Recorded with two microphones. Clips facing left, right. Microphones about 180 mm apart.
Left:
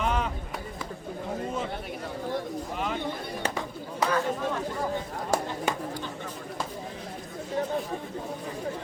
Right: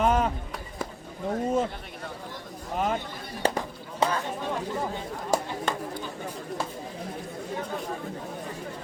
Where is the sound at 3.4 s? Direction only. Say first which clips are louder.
Right 6 dB; 30° right (ahead or behind).